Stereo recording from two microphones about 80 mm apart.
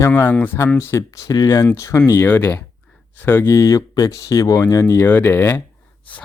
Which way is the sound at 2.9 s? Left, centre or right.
Left.